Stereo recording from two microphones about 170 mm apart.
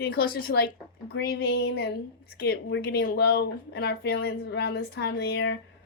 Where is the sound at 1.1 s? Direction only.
85° left.